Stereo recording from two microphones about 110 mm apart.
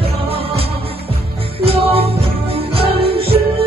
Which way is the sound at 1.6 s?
60° right (ahead or behind).